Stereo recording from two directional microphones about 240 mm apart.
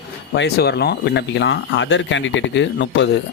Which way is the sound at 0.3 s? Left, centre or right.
Left.